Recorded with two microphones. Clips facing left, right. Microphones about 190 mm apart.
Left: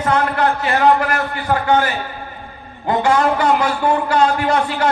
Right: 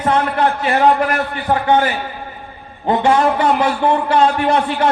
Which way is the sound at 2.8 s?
25° right (ahead or behind).